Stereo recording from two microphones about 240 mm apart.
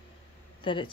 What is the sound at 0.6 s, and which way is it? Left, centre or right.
Speech, centre.